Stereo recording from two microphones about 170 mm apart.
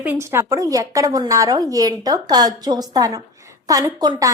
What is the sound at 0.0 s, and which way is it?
A woman's voice, 15° right (ahead or behind).